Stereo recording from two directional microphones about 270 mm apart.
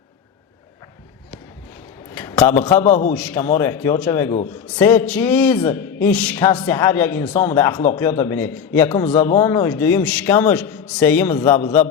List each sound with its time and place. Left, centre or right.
2.1 s a man's voice: centre
2.8 s a man's voice: left
3.2 s speech: centre